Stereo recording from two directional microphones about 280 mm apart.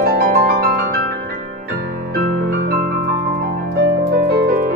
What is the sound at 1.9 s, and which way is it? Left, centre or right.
Keyboard, right.